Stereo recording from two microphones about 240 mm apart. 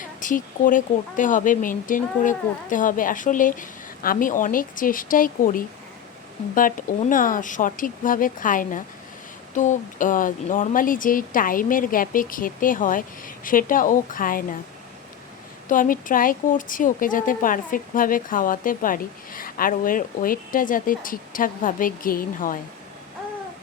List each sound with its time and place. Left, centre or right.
0.0 s a woman's voice: left
15.7 s a woman's voice: left